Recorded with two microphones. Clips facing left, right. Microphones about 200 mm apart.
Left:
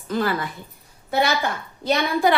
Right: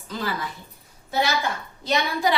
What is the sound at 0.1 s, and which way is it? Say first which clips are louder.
Speech: left 7 dB; 55° left (ahead or behind).